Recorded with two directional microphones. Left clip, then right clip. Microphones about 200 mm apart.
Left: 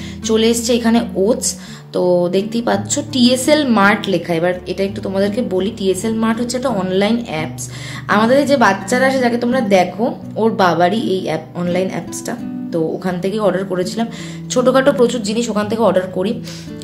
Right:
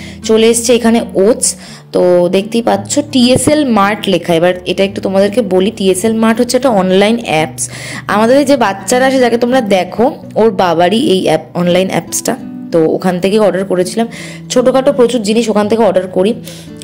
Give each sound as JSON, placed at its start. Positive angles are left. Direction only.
{"t": 0.2, "sound": "a woman's voice", "side_deg": -25}
{"t": 14.5, "sound": "speech", "side_deg": -20}